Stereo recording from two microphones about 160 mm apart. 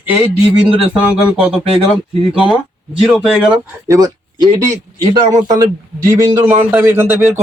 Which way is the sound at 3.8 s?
20° right (ahead or behind).